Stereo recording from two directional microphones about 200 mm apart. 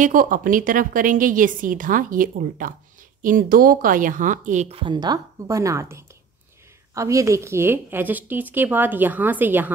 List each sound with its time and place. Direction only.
0.0 s a woman's voice: 45° right (ahead or behind); by 9.7 s 10° right (ahead or behind)